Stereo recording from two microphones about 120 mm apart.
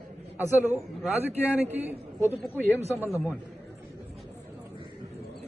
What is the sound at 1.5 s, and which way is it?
Speech, 15° right (ahead or behind).